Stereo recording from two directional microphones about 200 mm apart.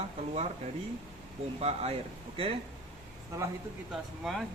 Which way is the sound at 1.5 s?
30° right (ahead or behind).